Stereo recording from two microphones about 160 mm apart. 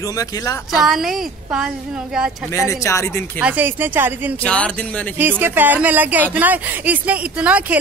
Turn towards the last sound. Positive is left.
turn(degrees=-10)  # may be behind; listen again after turning